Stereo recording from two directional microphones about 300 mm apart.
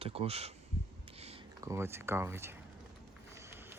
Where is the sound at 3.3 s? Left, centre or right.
Centre.